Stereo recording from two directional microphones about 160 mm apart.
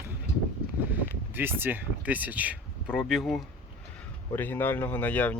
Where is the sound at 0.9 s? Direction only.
10° right (ahead or behind).